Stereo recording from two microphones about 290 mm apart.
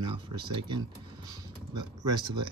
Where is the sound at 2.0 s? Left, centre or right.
Centre.